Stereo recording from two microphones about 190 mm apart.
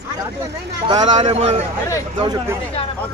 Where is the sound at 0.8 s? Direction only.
25° right (ahead or behind).